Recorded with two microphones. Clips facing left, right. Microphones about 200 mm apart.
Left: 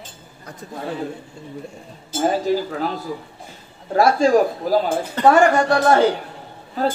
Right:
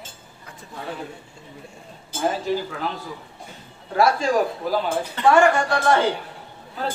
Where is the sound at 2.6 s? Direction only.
40° left (ahead or behind).